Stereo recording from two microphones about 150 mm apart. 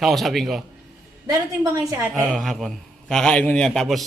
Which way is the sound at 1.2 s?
25° right (ahead or behind).